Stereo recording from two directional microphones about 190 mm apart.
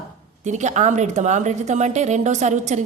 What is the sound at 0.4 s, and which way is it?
A woman's voice, 40° right (ahead or behind).